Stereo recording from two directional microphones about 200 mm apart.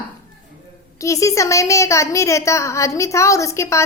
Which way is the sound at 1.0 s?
15° left (ahead or behind).